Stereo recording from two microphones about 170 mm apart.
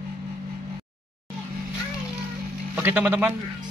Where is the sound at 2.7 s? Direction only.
10° right (ahead or behind).